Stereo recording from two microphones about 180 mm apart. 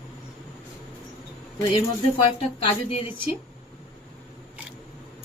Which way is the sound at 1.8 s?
30° left (ahead or behind).